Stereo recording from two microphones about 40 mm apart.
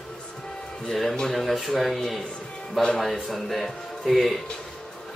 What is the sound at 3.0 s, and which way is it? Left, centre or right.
Speech, centre.